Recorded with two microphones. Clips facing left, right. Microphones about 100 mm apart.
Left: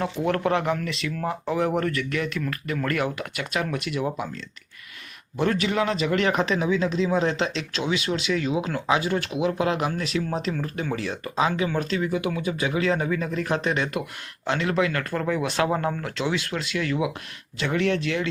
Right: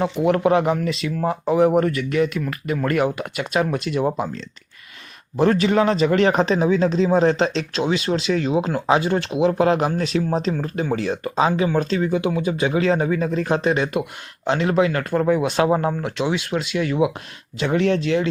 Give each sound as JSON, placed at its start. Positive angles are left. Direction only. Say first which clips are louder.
{"t": 0.0, "sound": "speech", "louder": "right 6 dB", "side_deg": -15}
{"t": 5.4, "sound": "speech", "louder": "right 6 dB", "side_deg": -35}